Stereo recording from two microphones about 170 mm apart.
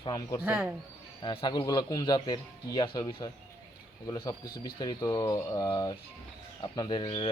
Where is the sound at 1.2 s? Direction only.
30° left (ahead or behind).